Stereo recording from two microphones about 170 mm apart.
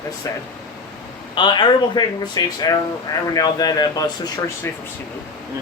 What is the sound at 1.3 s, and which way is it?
Speech, 25° left (ahead or behind).